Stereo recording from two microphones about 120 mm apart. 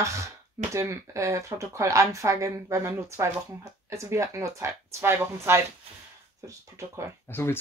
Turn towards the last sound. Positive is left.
turn(degrees=20)  # may be behind; listen again after turning